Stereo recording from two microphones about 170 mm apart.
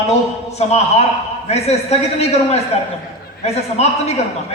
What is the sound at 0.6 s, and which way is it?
A man's voice, 40° left (ahead or behind).